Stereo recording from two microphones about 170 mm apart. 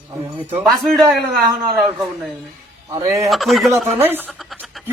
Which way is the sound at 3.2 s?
Centre (ahead or behind).